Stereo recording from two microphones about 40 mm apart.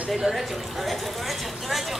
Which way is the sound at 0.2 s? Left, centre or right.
Centre.